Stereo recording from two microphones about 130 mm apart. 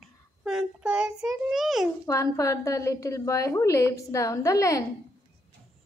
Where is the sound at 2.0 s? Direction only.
25° left (ahead or behind).